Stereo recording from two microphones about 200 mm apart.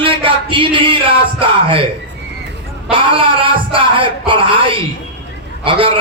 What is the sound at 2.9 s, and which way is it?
A man's voice, 25° right (ahead or behind).